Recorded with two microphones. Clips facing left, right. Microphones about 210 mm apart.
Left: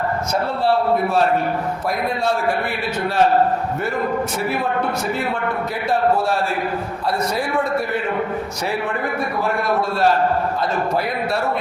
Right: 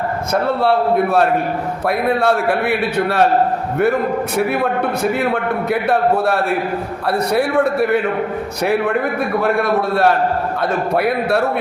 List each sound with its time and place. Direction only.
0.6 s a man's voice: 60° right (ahead or behind)
4.4 s a man's voice: 60° right (ahead or behind)
9.9 s a man's voice: 60° right (ahead or behind)